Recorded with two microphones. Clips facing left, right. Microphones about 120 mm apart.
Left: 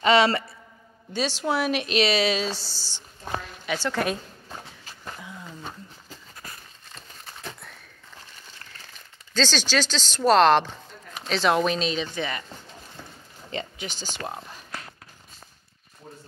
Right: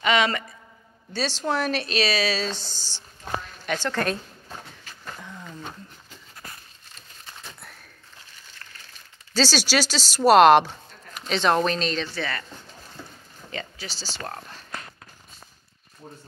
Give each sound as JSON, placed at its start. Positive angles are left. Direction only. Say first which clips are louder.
{"t": 0.0, "sound": "a woman's voice", "louder": "left 3 dB", "side_deg": 30}
{"t": 1.1, "sound": "a woman's voice", "louder": "even", "side_deg": 10}
{"t": 2.4, "sound": "a woman's voice", "louder": "even", "side_deg": 10}
{"t": 3.6, "sound": "a sound", "louder": "even", "side_deg": 10}
{"t": 9.3, "sound": "speech", "louder": "right 2 dB", "side_deg": -10}
{"t": 11.2, "sound": "a woman's voice", "louder": "even", "side_deg": 0}
{"t": 13.5, "sound": "a sound", "louder": "left 3 dB", "side_deg": 20}
{"t": 14.1, "sound": "a woman's voice", "louder": "left 1 dB", "side_deg": 10}